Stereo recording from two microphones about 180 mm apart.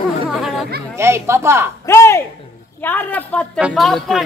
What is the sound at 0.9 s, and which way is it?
Speech, 15° right (ahead or behind).